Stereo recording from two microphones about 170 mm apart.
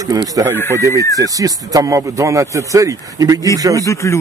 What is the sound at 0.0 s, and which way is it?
A man's voice, 20° right (ahead or behind).